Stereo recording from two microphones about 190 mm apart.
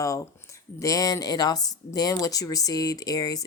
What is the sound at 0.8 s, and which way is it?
A woman's voice, 20° left (ahead or behind).